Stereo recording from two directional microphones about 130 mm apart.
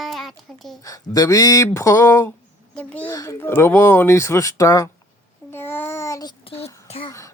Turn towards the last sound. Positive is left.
turn(degrees=25)  # may be behind; listen again after turning